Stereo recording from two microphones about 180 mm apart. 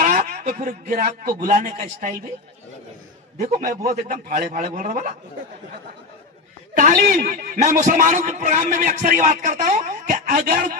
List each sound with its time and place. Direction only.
0.0 s a man's voice: 45° right (ahead or behind)
3.3 s a man's voice: 45° right (ahead or behind)
6.8 s a man's voice: 50° right (ahead or behind)